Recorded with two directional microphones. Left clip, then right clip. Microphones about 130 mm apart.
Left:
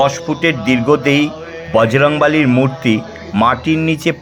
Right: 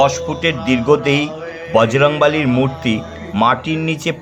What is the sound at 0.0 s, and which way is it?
Speech, 20° left (ahead or behind).